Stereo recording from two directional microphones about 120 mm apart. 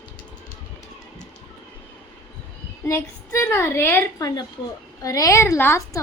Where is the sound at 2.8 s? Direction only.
20° left (ahead or behind).